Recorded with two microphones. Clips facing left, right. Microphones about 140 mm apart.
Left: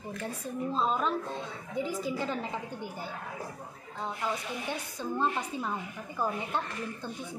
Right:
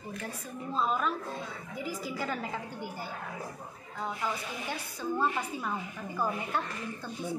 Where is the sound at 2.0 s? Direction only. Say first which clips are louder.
Left 2 dB; 25° left (ahead or behind).